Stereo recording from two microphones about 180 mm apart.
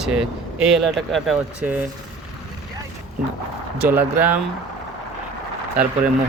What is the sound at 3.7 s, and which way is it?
Speech, 10° right (ahead or behind).